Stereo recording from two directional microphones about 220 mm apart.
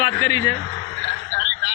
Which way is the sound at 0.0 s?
15° left (ahead or behind).